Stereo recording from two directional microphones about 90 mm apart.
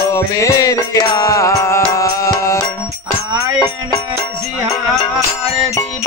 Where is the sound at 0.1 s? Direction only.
35° left (ahead or behind).